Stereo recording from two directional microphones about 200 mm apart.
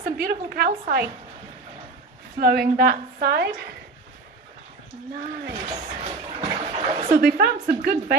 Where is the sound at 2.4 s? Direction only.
50° right (ahead or behind).